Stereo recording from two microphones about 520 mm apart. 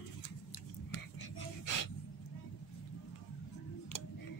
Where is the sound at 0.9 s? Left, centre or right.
Left.